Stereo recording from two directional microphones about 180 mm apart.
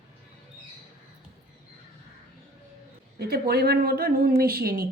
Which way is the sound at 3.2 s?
60° right (ahead or behind).